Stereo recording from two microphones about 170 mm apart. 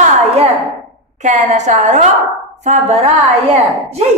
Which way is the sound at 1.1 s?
45° right (ahead or behind).